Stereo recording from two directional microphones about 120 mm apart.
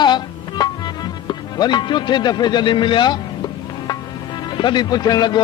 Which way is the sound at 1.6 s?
35° left (ahead or behind).